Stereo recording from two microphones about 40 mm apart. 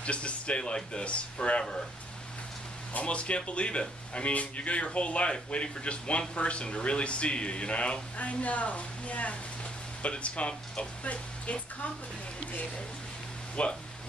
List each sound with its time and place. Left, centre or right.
0.0 s speech: left
2.9 s speech: left
13.6 s speech: left